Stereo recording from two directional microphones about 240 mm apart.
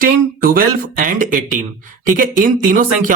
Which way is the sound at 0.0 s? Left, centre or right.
Right.